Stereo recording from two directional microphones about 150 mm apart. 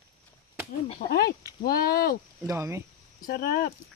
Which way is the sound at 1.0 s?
90° left.